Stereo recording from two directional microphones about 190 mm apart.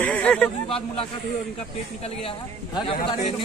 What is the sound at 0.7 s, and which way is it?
Speech, 30° left (ahead or behind).